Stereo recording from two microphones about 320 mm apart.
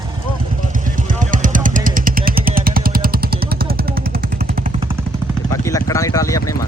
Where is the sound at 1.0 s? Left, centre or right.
Right.